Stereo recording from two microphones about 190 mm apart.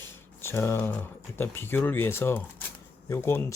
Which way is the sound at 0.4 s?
15° left (ahead or behind).